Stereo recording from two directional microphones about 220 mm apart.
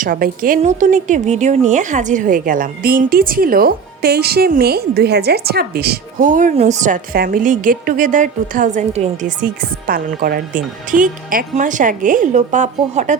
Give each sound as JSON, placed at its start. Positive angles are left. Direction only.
{"t": 0.0, "sound": "a woman's voice", "side_deg": -40}